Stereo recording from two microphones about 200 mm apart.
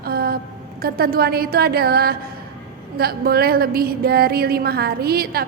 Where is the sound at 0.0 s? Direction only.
50° right (ahead or behind).